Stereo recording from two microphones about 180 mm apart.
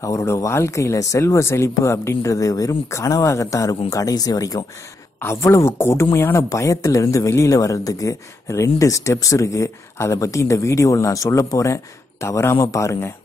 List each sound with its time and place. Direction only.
0.0 s a man's voice: 15° left (ahead or behind)